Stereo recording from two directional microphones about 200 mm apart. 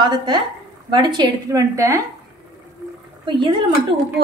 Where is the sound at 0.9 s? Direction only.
25° right (ahead or behind).